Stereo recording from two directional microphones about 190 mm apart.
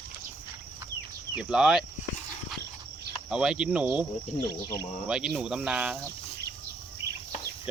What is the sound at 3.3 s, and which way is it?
Speech, 5° right (ahead or behind).